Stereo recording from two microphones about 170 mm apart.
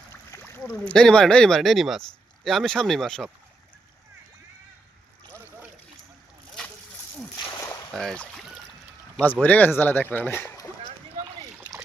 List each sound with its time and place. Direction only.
0.1 s a sound: 15° left (ahead or behind)
0.6 s speech: 5° left (ahead or behind)
7.9 s boat: 5° left (ahead or behind)
9.2 s speech: 10° left (ahead or behind)